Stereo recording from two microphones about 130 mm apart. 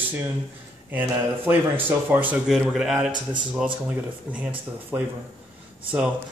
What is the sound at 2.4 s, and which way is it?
Speech, 5° right (ahead or behind).